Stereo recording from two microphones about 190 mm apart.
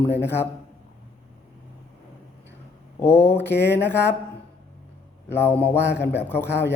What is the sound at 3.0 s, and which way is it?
Speech, 10° left (ahead or behind).